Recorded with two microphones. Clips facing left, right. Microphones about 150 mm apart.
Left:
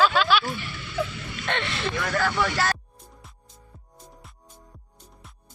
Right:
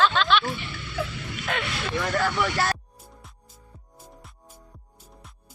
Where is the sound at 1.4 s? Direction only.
5° right (ahead or behind).